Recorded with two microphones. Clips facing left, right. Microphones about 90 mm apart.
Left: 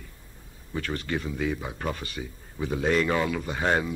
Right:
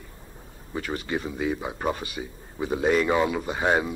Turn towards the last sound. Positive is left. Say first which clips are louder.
# right 2 dB
turn(degrees=-10)  # may be behind; listen again after turning